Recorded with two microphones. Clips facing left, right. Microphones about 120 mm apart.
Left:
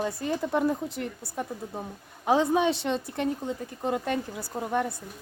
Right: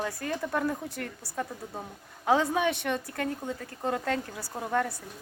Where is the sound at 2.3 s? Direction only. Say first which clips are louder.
Left 2 dB; 20° left (ahead or behind).